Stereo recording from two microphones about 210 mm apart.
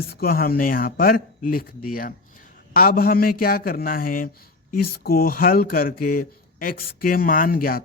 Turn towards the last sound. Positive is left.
turn(degrees=45)  # may be behind; listen again after turning